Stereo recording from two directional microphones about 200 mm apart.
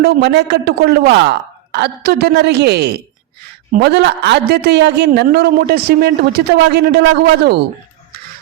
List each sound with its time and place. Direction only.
0.0 s a woman's voice: 55° right (ahead or behind)